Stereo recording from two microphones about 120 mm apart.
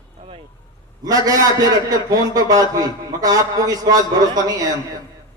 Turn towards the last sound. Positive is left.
turn(degrees=-30)  # may be behind; listen again after turning